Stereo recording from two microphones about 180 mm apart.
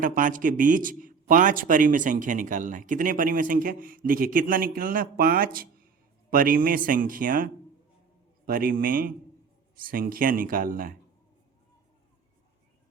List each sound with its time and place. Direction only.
0.0 s speech: 50° right (ahead or behind)